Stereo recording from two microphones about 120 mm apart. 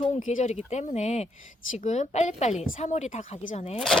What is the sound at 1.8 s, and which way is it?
Speech, 85° left.